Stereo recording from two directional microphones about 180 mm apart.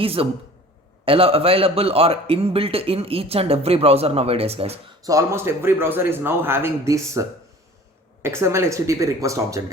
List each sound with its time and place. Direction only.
0.0 s a man's voice: 30° right (ahead or behind)
5.0 s a man's voice: 15° right (ahead or behind)